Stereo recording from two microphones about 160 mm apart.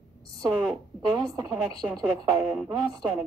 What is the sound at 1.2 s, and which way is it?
Speech, 20° right (ahead or behind).